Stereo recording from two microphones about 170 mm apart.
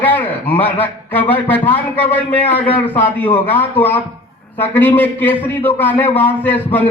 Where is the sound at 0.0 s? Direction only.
10° left (ahead or behind).